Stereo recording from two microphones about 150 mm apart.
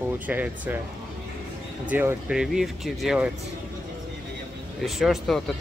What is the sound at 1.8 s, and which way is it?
Speech, 15° right (ahead or behind).